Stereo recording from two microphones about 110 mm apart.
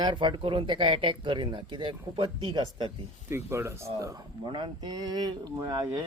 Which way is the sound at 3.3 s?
25° right (ahead or behind).